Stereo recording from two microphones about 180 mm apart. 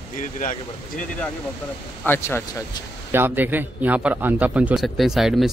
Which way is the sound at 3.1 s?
10° right (ahead or behind).